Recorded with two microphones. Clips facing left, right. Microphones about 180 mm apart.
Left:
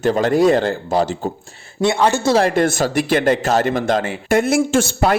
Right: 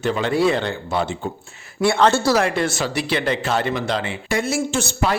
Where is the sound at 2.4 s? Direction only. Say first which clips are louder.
Left 5 dB; 50° left (ahead or behind).